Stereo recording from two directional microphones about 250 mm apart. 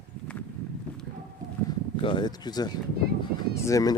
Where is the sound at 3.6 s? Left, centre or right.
Centre.